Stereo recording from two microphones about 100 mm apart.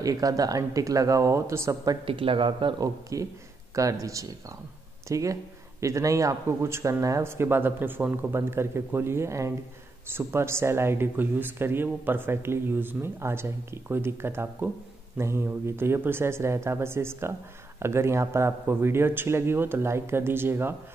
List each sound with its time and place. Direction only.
0.0 s speech: 35° right (ahead or behind)
2.0 s speech: 65° right (ahead or behind)
2.8 s speech: 35° right (ahead or behind)